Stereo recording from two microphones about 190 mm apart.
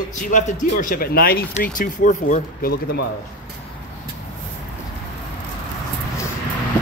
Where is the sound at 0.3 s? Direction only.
45° left (ahead or behind).